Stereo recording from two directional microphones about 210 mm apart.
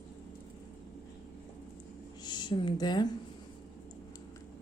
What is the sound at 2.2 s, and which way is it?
Speech, 20° left (ahead or behind).